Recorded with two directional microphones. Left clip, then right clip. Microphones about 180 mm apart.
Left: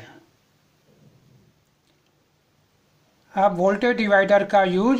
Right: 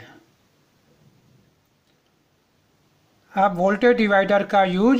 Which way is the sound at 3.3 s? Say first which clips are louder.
Even; 35° right (ahead or behind).